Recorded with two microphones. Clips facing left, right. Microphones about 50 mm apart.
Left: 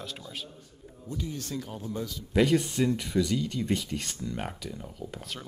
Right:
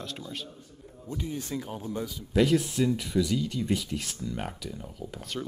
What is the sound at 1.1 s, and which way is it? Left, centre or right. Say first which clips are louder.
A man's voice: right 1 dB; centre.